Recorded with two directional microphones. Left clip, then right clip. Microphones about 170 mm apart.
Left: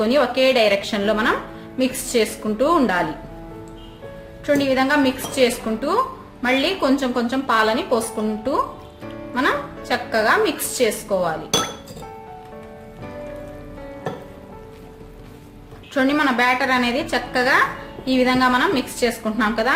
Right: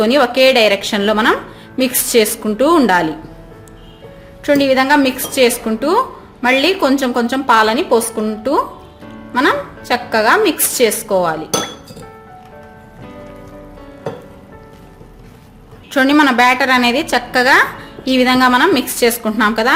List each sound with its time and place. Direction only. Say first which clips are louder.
0.0 s a woman's voice: right 6 dB; 55° right (ahead or behind)
4.4 s a woman's voice: right 6 dB; 55° right (ahead or behind)
15.9 s a woman's voice: right 7 dB; 55° right (ahead or behind)